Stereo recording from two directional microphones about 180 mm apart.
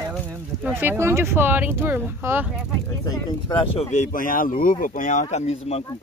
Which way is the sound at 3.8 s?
45° left (ahead or behind).